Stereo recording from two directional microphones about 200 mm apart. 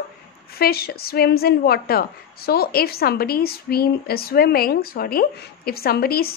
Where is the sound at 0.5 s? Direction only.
50° left (ahead or behind).